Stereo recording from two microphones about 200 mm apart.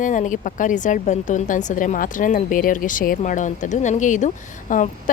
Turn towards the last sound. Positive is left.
turn(degrees=40)  # may be behind; listen again after turning